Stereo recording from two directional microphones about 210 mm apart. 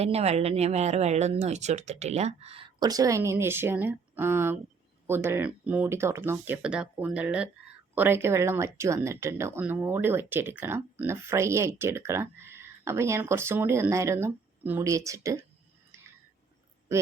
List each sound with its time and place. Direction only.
0.0 s speech: 30° right (ahead or behind); by 15.4 s 15° right (ahead or behind)